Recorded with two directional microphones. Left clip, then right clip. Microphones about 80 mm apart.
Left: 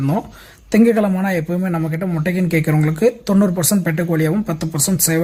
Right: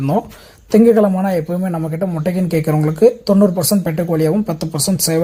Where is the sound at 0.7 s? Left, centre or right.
Right.